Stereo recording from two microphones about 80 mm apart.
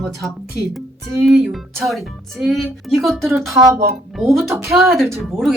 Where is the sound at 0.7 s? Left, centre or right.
Centre.